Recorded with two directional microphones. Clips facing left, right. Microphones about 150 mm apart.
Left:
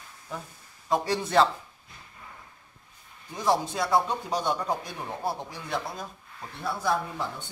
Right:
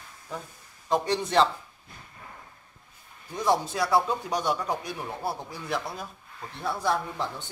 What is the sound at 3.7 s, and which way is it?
Speech, 25° left (ahead or behind).